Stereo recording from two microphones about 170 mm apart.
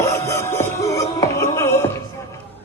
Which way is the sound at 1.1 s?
20° left (ahead or behind).